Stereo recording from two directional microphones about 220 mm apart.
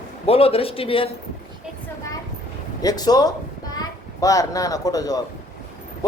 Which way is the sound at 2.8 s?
15° left (ahead or behind).